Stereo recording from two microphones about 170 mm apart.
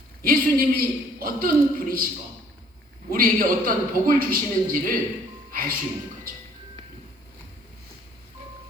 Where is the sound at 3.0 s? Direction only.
55° right (ahead or behind).